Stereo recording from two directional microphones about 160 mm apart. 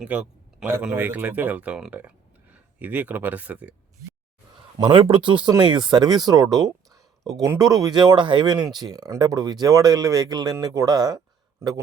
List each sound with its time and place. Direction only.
0.0 s speech: 5° right (ahead or behind)
4.8 s speech: 35° right (ahead or behind)